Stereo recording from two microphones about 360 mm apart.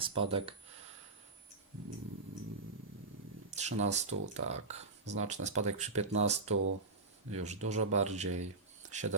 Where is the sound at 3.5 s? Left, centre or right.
Centre.